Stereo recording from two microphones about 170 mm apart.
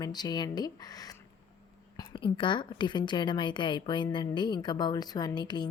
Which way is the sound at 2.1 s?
30° left (ahead or behind).